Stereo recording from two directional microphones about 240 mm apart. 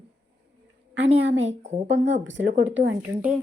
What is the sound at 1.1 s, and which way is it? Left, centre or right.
Speech, right.